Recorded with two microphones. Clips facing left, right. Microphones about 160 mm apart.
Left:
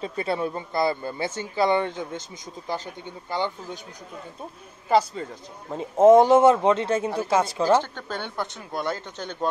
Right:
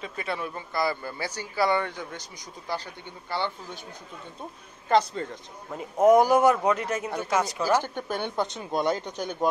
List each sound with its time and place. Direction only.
0.0 s a man's voice: 30° left (ahead or behind)
4.8 s speech: 5° left (ahead or behind)
5.7 s a man's voice: 25° left (ahead or behind)
7.7 s speech: 10° right (ahead or behind)